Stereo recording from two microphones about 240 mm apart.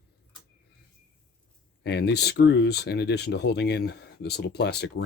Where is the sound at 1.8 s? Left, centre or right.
Left.